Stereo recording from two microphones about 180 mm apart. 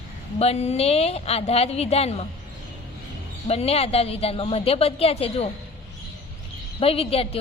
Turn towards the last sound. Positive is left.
turn(degrees=30)  # may be behind; listen again after turning